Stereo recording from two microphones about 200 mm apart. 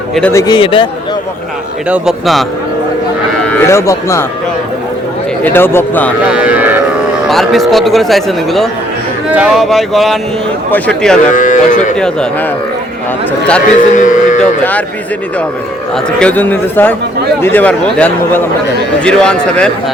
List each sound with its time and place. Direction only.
0.1 s speech: 5° left (ahead or behind); by 0.9 s 25° left (ahead or behind)
1.9 s speech: centre (ahead or behind)
3.4 s speech: 10° left (ahead or behind)
5.4 s a man's voice: 10° left (ahead or behind)
6.2 s cattle: 5° right (ahead or behind)
7.3 s a man's voice: centre (ahead or behind)
11.3 s cattle: 40° left (ahead or behind)
11.9 s speech: 5° left (ahead or behind)
13.9 s cattle: 40° left (ahead or behind)
14.6 s a man's voice: 10° left (ahead or behind)
16.2 s a man's voice: 10° left (ahead or behind)